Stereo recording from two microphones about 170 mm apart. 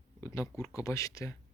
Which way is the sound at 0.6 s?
20° left (ahead or behind).